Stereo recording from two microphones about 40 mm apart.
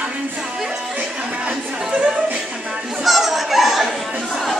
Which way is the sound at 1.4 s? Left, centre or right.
Right.